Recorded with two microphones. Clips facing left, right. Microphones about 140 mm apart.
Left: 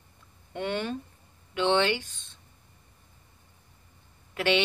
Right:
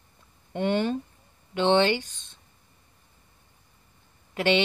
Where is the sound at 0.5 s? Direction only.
30° right (ahead or behind).